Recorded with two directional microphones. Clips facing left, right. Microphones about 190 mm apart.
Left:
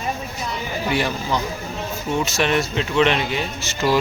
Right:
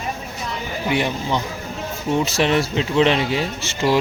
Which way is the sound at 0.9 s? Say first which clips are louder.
Right 2 dB; 20° right (ahead or behind).